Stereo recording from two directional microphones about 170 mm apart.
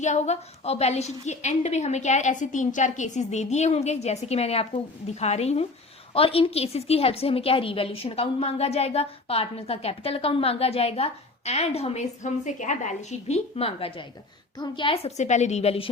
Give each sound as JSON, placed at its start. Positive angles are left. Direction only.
{"t": 0.0, "sound": "a woman's voice", "side_deg": 40}